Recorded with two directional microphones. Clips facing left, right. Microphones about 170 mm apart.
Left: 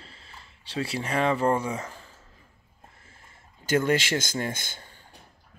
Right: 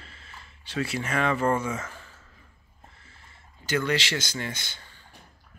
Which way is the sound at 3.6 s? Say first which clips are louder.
Left 3 dB; 45° left (ahead or behind).